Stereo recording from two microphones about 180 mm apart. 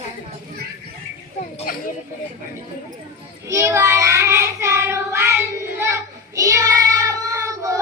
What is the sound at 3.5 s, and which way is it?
Child singing, 15° right (ahead or behind).